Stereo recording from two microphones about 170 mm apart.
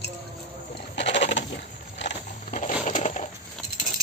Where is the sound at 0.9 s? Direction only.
90° left.